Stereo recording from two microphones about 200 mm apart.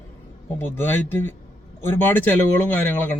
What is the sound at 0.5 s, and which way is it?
Speech, 10° left (ahead or behind).